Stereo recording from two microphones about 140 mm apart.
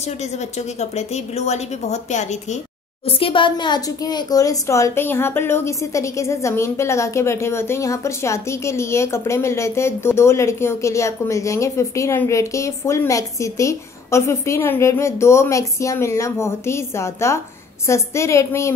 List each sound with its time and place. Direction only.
0.6 s a woman's voice: 50° left (ahead or behind)
3.1 s speech: 40° left (ahead or behind); by 18.8 s 20° left (ahead or behind)